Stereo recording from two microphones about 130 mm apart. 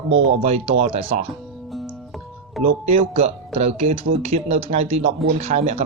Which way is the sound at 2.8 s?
55° right (ahead or behind).